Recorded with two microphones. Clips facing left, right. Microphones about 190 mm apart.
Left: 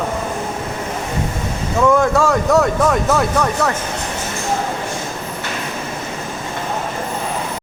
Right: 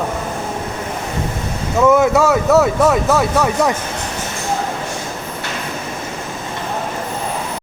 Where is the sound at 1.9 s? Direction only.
5° right (ahead or behind).